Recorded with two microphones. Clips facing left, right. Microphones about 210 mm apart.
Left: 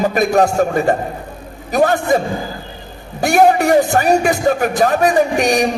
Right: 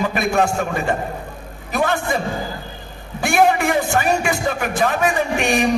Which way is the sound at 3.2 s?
40° left (ahead or behind).